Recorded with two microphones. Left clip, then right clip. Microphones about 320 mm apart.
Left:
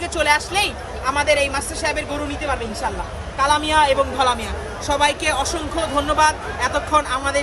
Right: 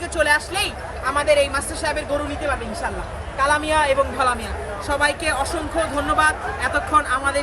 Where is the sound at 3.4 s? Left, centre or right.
Centre.